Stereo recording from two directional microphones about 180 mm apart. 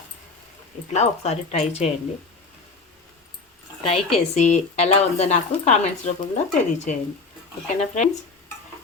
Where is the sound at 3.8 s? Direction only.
35° left (ahead or behind).